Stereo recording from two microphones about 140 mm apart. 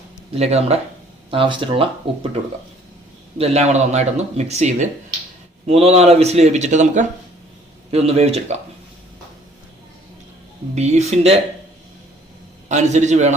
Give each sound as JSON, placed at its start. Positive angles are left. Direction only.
{"t": 0.3, "sound": "speech", "side_deg": -50}
{"t": 1.3, "sound": "speech", "side_deg": -35}
{"t": 3.3, "sound": "speech", "side_deg": -50}
{"t": 7.9, "sound": "speech", "side_deg": -45}
{"t": 10.8, "sound": "speech", "side_deg": -55}
{"t": 12.6, "sound": "a man's voice", "side_deg": -55}